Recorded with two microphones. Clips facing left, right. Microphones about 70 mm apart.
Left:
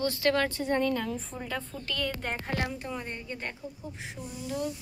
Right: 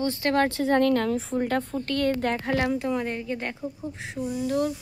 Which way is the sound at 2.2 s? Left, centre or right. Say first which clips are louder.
Right 8 dB; right.